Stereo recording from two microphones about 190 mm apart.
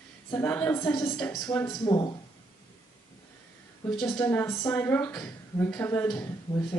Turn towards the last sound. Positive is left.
turn(degrees=20)  # may be behind; listen again after turning